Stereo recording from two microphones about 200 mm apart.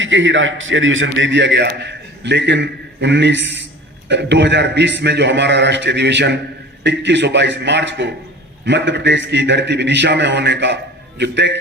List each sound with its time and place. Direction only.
0.0 s a man's voice: 70° right (ahead or behind)